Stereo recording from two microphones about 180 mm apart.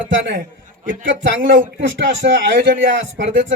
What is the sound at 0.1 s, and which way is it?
Speech, 65° right (ahead or behind).